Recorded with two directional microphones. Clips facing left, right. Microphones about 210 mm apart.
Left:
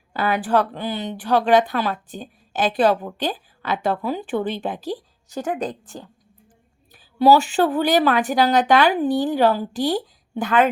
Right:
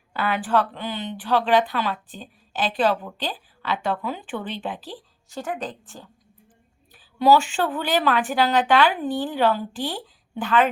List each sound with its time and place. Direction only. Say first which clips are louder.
0.1 s speech: left 3 dB; 40° left (ahead or behind)